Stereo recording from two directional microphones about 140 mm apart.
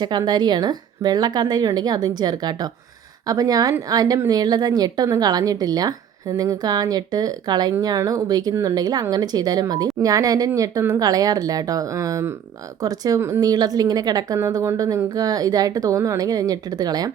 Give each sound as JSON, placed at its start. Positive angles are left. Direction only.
{"t": 0.0, "sound": "speech", "side_deg": -30}